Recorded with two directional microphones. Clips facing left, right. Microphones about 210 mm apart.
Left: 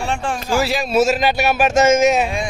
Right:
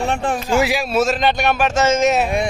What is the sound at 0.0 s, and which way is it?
Speech, 20° right (ahead or behind).